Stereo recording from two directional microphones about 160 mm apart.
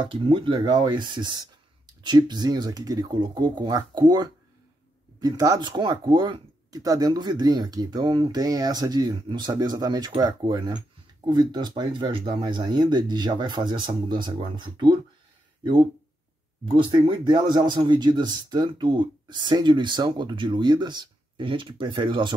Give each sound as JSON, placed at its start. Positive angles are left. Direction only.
{"t": 0.0, "sound": "speech", "side_deg": -30}
{"t": 16.6, "sound": "speech", "side_deg": -30}